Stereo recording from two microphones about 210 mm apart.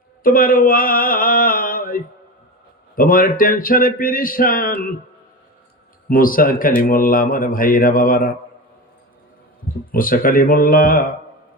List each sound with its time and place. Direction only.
0.2 s speech: 40° left (ahead or behind)
6.1 s speech: 40° left (ahead or behind)
9.9 s speech: 40° left (ahead or behind)